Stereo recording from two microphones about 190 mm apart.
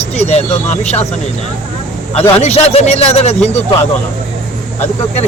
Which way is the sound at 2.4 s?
35° left (ahead or behind).